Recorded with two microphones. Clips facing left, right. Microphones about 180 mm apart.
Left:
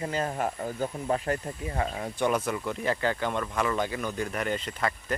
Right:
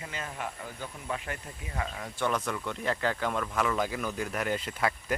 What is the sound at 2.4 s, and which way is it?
Speech, 5° left (ahead or behind).